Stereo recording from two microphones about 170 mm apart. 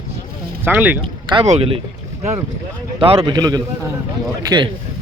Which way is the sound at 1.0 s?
30° right (ahead or behind).